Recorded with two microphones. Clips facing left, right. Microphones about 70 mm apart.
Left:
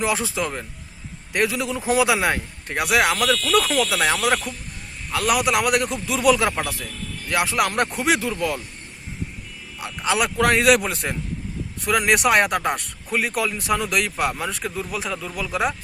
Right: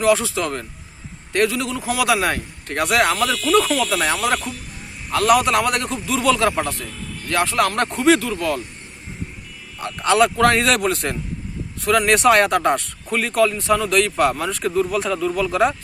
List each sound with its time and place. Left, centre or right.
0.0 s speech: left
3.2 s speech: centre
6.5 s speech: centre
7.3 s speech: centre
9.8 s speech: centre